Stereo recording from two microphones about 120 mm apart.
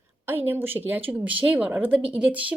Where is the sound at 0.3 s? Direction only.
15° right (ahead or behind).